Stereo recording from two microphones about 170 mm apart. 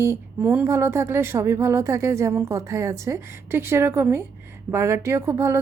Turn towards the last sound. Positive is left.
turn(degrees=-15)  # may be behind; listen again after turning